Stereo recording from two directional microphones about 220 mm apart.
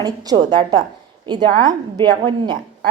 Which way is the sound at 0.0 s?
20° right (ahead or behind).